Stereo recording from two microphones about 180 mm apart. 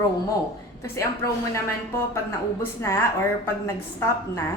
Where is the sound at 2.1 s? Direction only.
15° left (ahead or behind).